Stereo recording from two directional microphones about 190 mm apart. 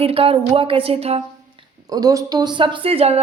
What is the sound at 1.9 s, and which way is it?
A woman's voice, 20° right (ahead or behind).